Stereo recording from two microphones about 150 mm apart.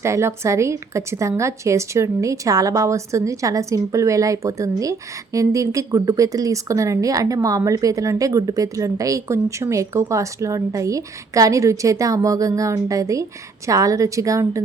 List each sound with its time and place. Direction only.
0.0 s a woman's voice: 20° right (ahead or behind)